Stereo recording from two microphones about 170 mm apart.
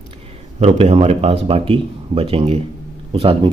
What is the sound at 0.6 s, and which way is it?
A man's voice, 40° right (ahead or behind).